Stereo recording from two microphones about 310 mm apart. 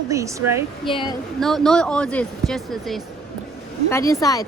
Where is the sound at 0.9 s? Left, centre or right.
Centre.